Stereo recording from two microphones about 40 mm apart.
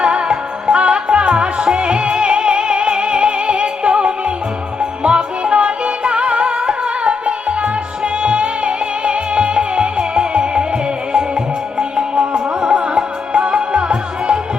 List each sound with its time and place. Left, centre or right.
0.0 s music: right